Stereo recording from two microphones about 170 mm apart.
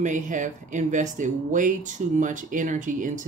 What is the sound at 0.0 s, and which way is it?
Speech, 45° right (ahead or behind).